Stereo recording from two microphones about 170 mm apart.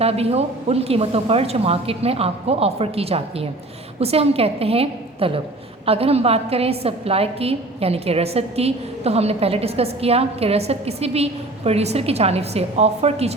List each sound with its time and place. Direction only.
0.0 s a woman's voice: 35° right (ahead or behind)